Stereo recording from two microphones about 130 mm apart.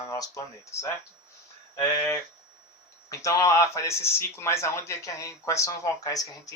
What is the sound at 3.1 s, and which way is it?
Speech, 25° left (ahead or behind).